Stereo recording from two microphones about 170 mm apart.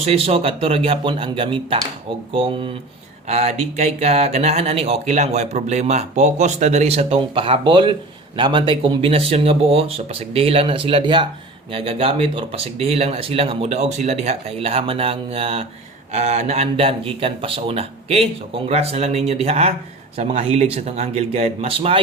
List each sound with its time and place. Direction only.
0.0 s speech: 35° right (ahead or behind)